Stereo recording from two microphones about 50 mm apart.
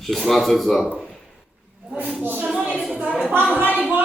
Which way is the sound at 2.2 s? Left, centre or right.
Right.